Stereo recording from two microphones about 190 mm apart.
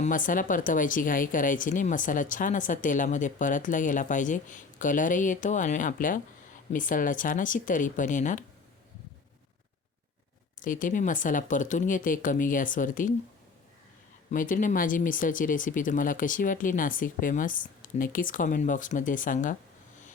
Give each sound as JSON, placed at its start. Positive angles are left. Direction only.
{"t": 0.0, "sound": "speech", "side_deg": 45}
{"t": 10.6, "sound": "speech", "side_deg": 45}
{"t": 14.3, "sound": "speech", "side_deg": 45}